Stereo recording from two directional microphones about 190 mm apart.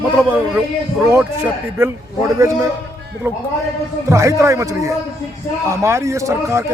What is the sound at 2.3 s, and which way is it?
Speech, 15° right (ahead or behind).